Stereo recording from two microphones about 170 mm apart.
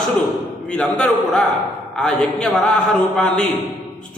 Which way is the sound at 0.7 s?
5° left (ahead or behind).